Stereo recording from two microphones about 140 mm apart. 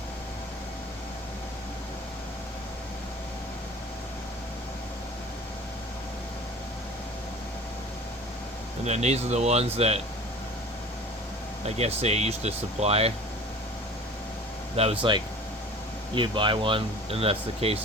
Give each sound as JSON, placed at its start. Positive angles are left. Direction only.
{"t": 8.8, "sound": "speech", "side_deg": -50}
{"t": 11.6, "sound": "speech", "side_deg": -50}
{"t": 14.8, "sound": "speech", "side_deg": -45}
{"t": 16.1, "sound": "speech", "side_deg": -35}